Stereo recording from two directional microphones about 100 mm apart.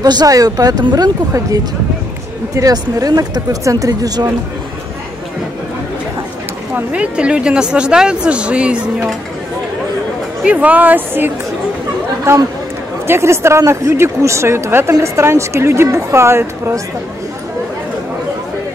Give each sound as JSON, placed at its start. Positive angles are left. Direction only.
{"t": 0.0, "sound": "speech", "side_deg": -40}
{"t": 6.7, "sound": "a woman's voice", "side_deg": -10}
{"t": 10.4, "sound": "a woman's voice", "side_deg": -15}